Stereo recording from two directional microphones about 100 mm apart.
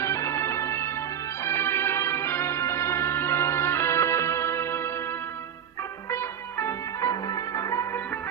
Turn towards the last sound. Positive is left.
turn(degrees=30)  # may be behind; listen again after turning